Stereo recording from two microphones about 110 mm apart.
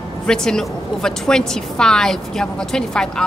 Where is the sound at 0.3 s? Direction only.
5° left (ahead or behind).